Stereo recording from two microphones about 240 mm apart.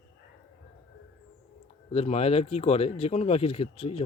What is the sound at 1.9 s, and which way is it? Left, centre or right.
Speech, left.